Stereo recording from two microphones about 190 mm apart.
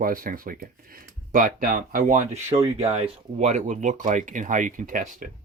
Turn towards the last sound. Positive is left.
turn(degrees=-45)  # may be behind; listen again after turning